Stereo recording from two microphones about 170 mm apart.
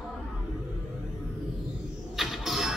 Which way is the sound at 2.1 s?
Centre (ahead or behind).